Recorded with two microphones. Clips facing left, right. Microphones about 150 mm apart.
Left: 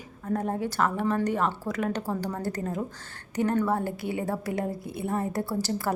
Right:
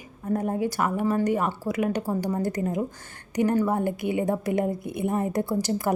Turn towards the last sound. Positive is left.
turn(degrees=-15)  # may be behind; listen again after turning